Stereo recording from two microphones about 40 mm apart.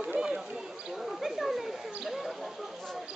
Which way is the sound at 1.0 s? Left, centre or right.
Centre.